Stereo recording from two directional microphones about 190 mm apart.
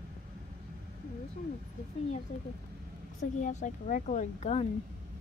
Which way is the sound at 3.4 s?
40° left (ahead or behind).